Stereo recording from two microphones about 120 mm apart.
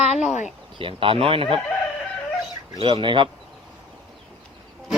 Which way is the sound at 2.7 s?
45° right (ahead or behind).